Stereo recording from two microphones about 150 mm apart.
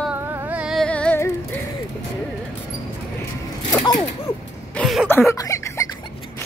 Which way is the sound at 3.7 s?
20° left (ahead or behind).